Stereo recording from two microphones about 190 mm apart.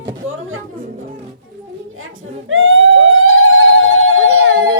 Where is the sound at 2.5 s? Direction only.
90° right.